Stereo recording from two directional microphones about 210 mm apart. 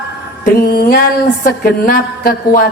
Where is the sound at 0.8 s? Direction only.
45° left (ahead or behind).